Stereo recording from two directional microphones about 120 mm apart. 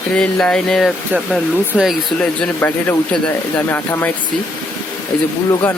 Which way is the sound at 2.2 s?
15° left (ahead or behind).